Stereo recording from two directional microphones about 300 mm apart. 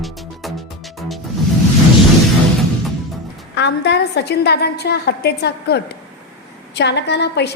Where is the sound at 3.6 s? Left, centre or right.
Left.